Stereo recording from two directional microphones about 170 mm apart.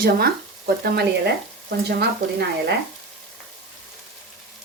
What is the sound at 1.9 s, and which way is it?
Speech, 75° right (ahead or behind).